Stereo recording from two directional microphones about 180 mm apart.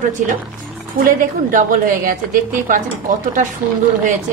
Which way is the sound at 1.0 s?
50° right (ahead or behind).